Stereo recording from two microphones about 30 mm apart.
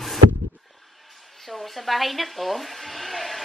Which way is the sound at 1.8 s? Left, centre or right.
Centre.